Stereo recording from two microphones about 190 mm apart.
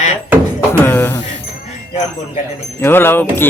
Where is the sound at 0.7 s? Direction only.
10° left (ahead or behind).